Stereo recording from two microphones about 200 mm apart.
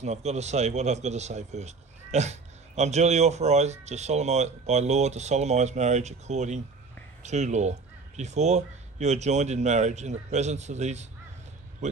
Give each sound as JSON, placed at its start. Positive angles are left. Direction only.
{"t": 0.0, "sound": "speech", "side_deg": -35}